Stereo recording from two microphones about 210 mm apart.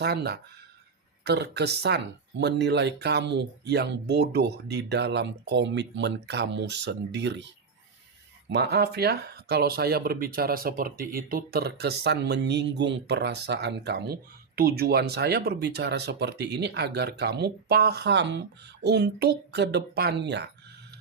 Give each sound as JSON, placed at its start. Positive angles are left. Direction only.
{"t": 0.0, "sound": "speech", "side_deg": -50}